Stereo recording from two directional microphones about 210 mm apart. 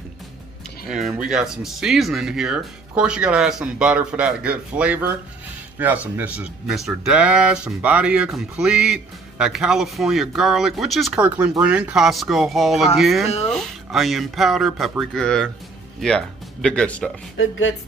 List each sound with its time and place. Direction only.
0.8 s speech: centre (ahead or behind)
17.4 s speech: 65° left (ahead or behind)